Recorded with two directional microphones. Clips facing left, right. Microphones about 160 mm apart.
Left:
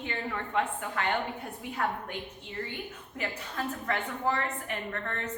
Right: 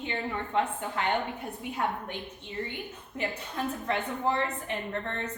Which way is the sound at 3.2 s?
20° right (ahead or behind).